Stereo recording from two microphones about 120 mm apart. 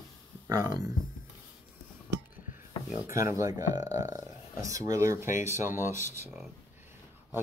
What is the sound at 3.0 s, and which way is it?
Speech, 25° right (ahead or behind).